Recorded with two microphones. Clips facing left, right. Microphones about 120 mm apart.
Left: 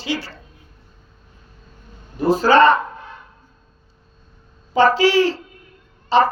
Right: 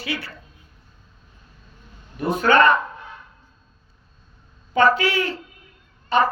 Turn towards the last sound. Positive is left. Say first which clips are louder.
# left 4 dB
turn(degrees=30)  # may be behind; listen again after turning